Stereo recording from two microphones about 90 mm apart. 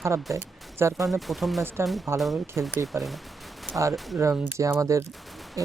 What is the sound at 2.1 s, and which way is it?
Speech, centre (ahead or behind).